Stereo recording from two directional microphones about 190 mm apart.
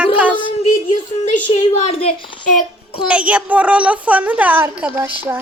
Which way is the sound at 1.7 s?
30° left (ahead or behind).